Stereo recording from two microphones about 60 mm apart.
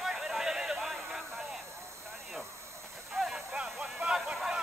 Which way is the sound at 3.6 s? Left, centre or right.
Centre.